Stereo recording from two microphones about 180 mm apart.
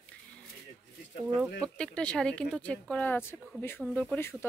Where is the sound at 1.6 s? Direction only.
5° left (ahead or behind).